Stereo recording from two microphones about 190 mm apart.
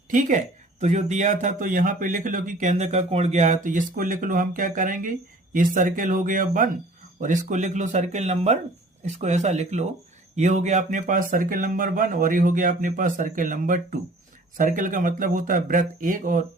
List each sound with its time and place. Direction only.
0.1 s speech: 40° right (ahead or behind)